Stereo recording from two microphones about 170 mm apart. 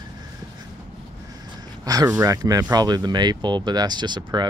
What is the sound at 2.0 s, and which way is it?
Speech, 15° right (ahead or behind).